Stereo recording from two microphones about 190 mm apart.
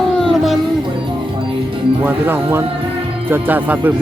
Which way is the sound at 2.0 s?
10° right (ahead or behind).